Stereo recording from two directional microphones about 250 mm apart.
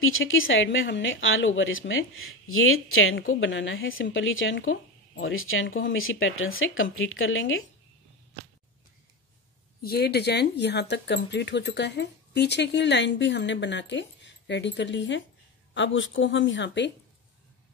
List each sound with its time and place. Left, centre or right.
0.0 s speech: left
9.8 s speech: left